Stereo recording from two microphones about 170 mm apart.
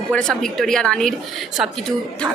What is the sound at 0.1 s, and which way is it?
A woman's voice, 5° left (ahead or behind).